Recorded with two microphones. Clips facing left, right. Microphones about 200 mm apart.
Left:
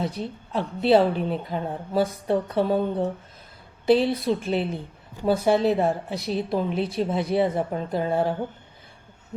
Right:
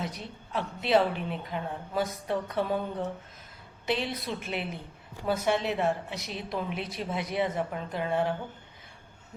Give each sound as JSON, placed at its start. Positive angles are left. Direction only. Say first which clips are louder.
{"t": 0.0, "sound": "a woman's voice", "louder": "left 8 dB", "side_deg": 30}